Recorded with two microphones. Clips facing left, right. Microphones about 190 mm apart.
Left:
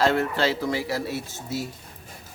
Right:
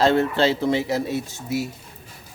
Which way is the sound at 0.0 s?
25° right (ahead or behind).